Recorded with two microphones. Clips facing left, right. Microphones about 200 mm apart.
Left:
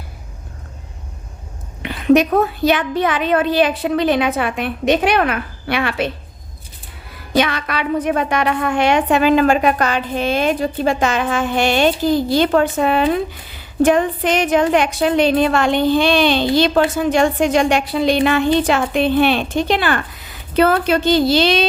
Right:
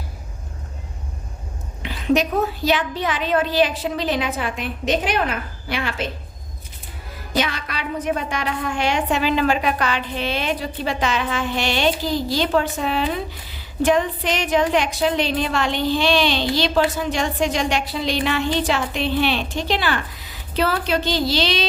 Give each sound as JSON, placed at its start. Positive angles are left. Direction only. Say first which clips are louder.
{"t": 1.8, "sound": "a woman's voice", "louder": "left 6 dB", "side_deg": 60}
{"t": 7.3, "sound": "a woman's voice", "louder": "left 6 dB", "side_deg": 60}